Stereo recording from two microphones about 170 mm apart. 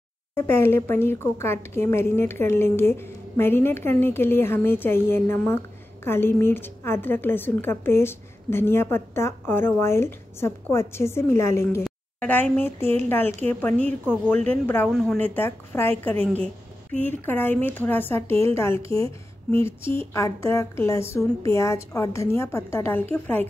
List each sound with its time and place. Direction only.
0.4 s a woman's voice: 15° left (ahead or behind)
18.9 s a woman's voice: 35° right (ahead or behind)
19.5 s a woman's voice: 15° left (ahead or behind)